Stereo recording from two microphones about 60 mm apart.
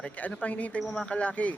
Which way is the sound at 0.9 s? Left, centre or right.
Centre.